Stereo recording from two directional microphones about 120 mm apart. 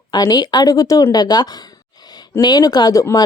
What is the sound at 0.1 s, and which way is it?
Speech, 35° left (ahead or behind).